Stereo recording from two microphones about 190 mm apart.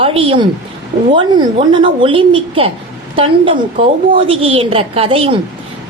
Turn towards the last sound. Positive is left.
turn(degrees=-30)  # may be behind; listen again after turning